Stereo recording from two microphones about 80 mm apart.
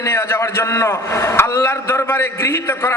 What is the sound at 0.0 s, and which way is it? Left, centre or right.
A man's voice, left.